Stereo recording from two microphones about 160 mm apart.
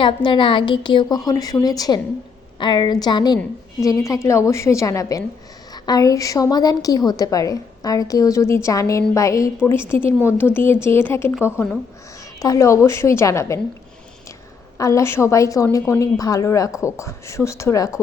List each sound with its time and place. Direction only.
0.0 s a woman's voice: 30° left (ahead or behind)
14.8 s a woman's voice: 20° left (ahead or behind)